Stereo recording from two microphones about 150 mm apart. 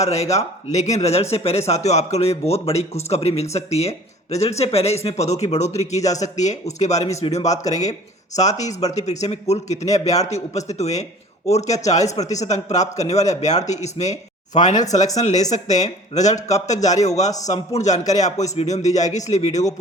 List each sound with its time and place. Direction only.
0.1 s speech: 45° left (ahead or behind)
7.7 s speech: 25° left (ahead or behind)
8.4 s speech: 50° left (ahead or behind)
12.0 s speech: 25° left (ahead or behind)
12.4 s speech: 50° left (ahead or behind)